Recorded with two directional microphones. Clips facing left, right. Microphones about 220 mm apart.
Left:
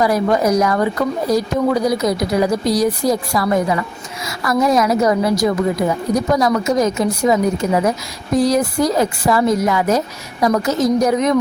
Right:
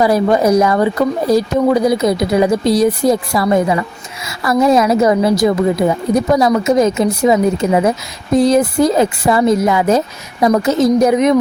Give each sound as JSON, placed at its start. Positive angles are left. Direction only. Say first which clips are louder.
{"t": 0.0, "sound": "speech", "louder": "right 3 dB", "side_deg": -25}